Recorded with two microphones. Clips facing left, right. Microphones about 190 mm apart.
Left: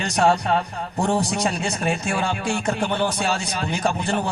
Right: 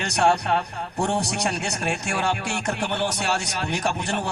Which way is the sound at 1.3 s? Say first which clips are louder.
Left 3 dB; 70° right (ahead or behind).